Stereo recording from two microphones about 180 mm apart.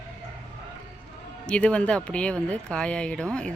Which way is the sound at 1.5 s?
5° left (ahead or behind).